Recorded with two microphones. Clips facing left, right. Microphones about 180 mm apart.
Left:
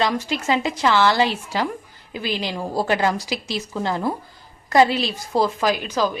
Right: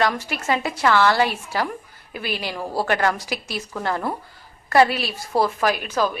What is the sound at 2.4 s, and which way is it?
A woman's voice, 20° left (ahead or behind).